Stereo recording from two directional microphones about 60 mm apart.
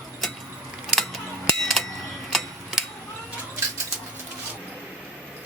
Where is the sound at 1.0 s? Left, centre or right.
Centre.